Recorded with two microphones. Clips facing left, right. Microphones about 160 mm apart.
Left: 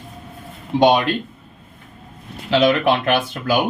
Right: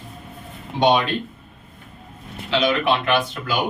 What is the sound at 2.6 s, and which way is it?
Speech, 50° left (ahead or behind).